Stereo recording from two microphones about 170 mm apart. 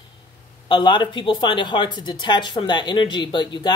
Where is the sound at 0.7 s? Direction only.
25° left (ahead or behind).